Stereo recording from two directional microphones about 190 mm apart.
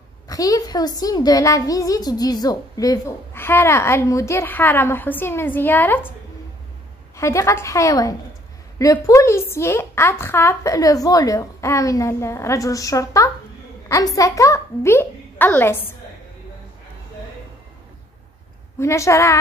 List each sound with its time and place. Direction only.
0.3 s a woman's voice: 20° left (ahead or behind)
7.2 s a woman's voice: 15° left (ahead or behind)
18.8 s a woman's voice: 15° left (ahead or behind)